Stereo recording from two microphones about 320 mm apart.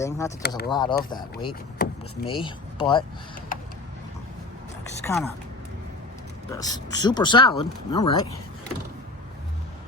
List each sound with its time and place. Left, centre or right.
0.0 s speech: centre
0.4 s speech: left
0.7 s speech: centre
5.0 s speech: centre
6.5 s speech: centre